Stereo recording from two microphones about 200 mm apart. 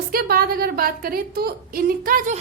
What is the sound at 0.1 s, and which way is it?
A woman's voice, 50° right (ahead or behind).